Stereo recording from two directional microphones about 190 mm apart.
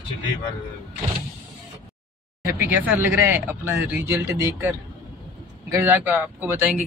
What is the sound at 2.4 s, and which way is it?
A man's voice, 10° right (ahead or behind).